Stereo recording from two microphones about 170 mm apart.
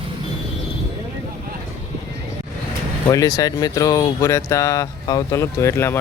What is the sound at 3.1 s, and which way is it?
Speech, 20° left (ahead or behind).